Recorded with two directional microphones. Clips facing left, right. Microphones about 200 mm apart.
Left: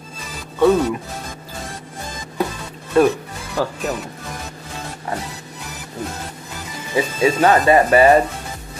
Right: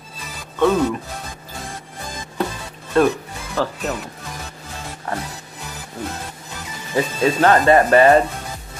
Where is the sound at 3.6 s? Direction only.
15° left (ahead or behind).